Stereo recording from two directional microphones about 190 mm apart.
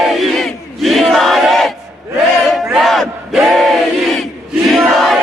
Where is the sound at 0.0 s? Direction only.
Centre (ahead or behind).